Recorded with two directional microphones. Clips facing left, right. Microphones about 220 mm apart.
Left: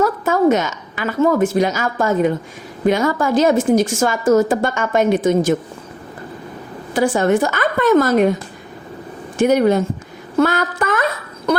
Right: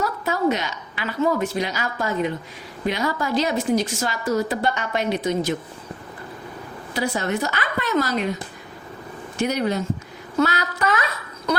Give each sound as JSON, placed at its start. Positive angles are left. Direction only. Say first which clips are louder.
{"t": 0.0, "sound": "a woman's voice", "louder": "left 7 dB", "side_deg": 50}
{"t": 6.9, "sound": "a woman's voice", "louder": "left 9 dB", "side_deg": 50}
{"t": 9.4, "sound": "a woman's voice", "louder": "left 9 dB", "side_deg": 50}
{"t": 10.4, "sound": "a sound", "louder": "left 4 dB", "side_deg": 50}